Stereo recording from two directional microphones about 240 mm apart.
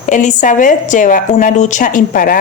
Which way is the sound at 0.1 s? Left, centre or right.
Left.